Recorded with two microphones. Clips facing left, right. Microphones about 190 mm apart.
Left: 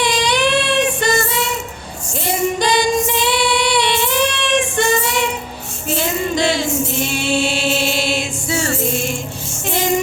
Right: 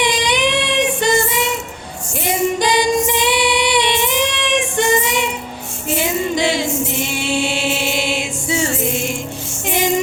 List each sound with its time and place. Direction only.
0.0 s child singing: 15° right (ahead or behind)
2.2 s female singing: 15° right (ahead or behind)
5.9 s singing: 15° right (ahead or behind)